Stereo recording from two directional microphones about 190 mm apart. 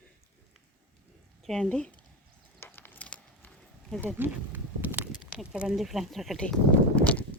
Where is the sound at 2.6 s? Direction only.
10° left (ahead or behind).